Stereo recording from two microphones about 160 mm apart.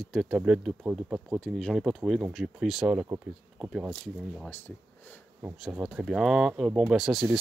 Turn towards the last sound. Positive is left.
turn(degrees=0)  # may be behind; listen again after turning